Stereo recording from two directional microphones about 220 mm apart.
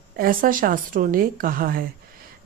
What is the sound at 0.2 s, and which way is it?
Speech, 40° right (ahead or behind).